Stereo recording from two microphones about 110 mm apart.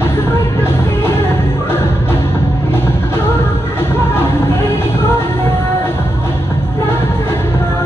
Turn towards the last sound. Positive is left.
turn(degrees=20)  # may be behind; listen again after turning